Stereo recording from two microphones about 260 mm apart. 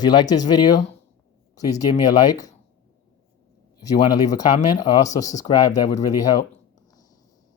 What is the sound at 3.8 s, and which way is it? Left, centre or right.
Speech, centre.